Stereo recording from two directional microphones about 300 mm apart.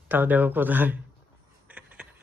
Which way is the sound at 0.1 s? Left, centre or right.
Centre.